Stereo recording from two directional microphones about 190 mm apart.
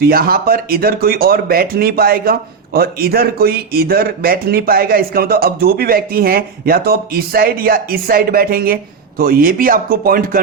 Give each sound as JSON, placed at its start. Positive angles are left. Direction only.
{"t": 0.0, "sound": "speech", "side_deg": -50}